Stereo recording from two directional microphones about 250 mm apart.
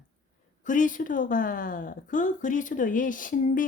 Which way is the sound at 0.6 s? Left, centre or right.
Left.